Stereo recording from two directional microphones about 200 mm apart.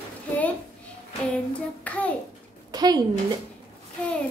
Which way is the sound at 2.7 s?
20° right (ahead or behind).